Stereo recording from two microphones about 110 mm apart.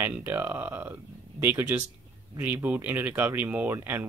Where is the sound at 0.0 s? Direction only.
20° right (ahead or behind).